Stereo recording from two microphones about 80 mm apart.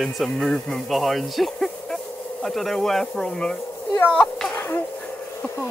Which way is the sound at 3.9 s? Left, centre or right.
Left.